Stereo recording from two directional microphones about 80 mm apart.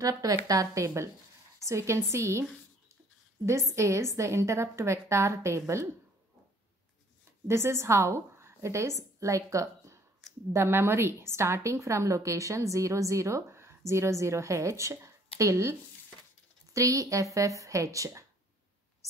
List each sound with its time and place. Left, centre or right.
0.0 s a woman's voice: right
3.4 s a woman's voice: right
7.4 s a woman's voice: right
16.7 s speech: right